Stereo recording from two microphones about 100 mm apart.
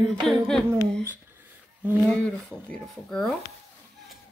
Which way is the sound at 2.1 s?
10° left (ahead or behind).